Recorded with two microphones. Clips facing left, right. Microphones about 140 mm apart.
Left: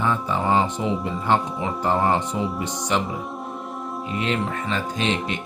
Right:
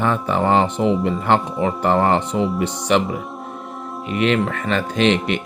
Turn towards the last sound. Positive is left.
turn(degrees=-75)  # may be behind; listen again after turning